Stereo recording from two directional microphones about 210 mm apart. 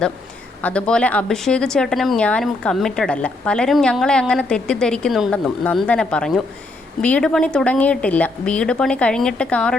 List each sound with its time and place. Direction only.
0.6 s speech: 5° left (ahead or behind)